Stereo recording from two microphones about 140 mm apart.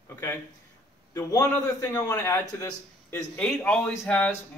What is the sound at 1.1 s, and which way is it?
A man's voice, 20° left (ahead or behind).